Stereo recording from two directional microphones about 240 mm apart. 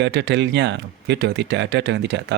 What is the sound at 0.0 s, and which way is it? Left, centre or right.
Speech, right.